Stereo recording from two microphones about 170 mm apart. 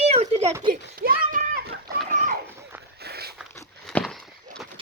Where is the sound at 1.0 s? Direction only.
60° right (ahead or behind).